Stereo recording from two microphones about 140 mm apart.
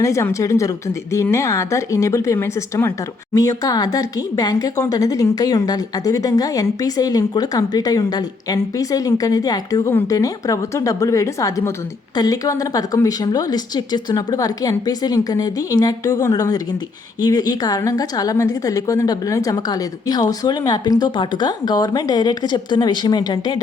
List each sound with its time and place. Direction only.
0.0 s speech: 20° left (ahead or behind)